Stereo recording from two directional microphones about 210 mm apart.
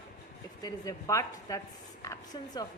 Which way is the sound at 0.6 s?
15° left (ahead or behind).